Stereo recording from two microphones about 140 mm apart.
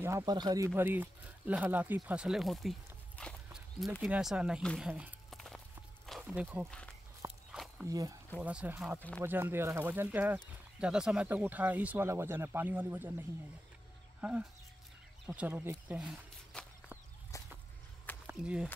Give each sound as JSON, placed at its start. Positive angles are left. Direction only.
{"t": 0.0, "sound": "speech", "side_deg": -25}
{"t": 0.7, "sound": "speech", "side_deg": -15}
{"t": 5.3, "sound": "walk", "side_deg": 5}
{"t": 6.0, "sound": "a sound", "side_deg": 0}
{"t": 6.3, "sound": "speech", "side_deg": -15}
{"t": 6.7, "sound": "speech", "side_deg": 5}
{"t": 7.2, "sound": "walk", "side_deg": 0}
{"t": 7.8, "sound": "speech", "side_deg": -25}
{"t": 8.4, "sound": "speech", "side_deg": -10}
{"t": 14.2, "sound": "speech", "side_deg": -5}
{"t": 16.0, "sound": "a sound", "side_deg": -5}
{"t": 17.3, "sound": "whip", "side_deg": 25}
{"t": 18.2, "sound": "speech", "side_deg": -5}